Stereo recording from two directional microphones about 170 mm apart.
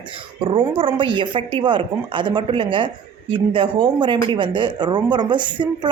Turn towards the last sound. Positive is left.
turn(degrees=-25)  # may be behind; listen again after turning